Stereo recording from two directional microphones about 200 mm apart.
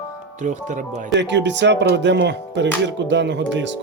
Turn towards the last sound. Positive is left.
turn(degrees=-65)  # may be behind; listen again after turning